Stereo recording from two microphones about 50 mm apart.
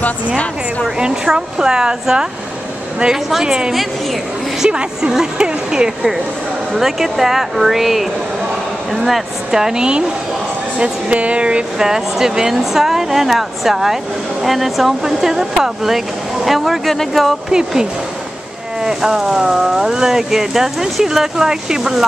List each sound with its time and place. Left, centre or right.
0.8 s speech: centre
3.3 s speech: centre
6.7 s speech: centre; by 11.6 s right
11.8 s speech: centre
17.5 s speech: centre